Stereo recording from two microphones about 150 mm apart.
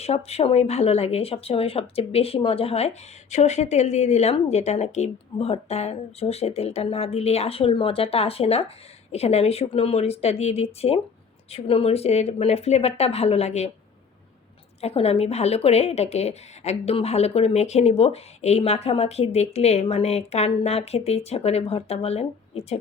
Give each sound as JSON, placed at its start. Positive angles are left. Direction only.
{"t": 0.0, "sound": "speech", "side_deg": 45}
{"t": 14.8, "sound": "speech", "side_deg": 45}